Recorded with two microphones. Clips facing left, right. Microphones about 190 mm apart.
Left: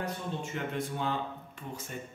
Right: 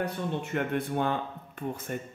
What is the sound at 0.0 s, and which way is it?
Speech, 60° right (ahead or behind).